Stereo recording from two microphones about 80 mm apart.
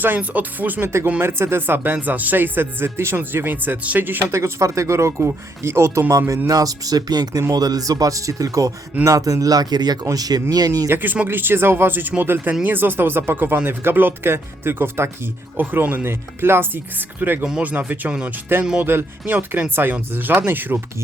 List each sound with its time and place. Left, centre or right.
0.0 s speech: right
10.8 s speech: right